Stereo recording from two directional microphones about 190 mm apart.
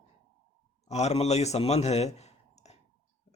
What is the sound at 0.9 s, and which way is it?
Speech, 35° left (ahead or behind).